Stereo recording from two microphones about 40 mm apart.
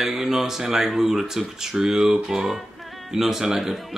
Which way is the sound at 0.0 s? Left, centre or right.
Centre.